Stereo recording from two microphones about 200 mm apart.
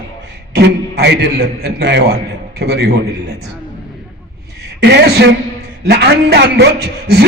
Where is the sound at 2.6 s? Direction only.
55° right (ahead or behind).